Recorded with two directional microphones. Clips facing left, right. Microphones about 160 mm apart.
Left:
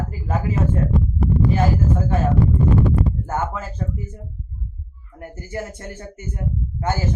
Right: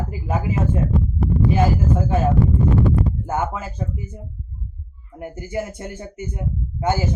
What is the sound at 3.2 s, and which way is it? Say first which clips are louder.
A man's voice: right 1 dB; 15° right (ahead or behind).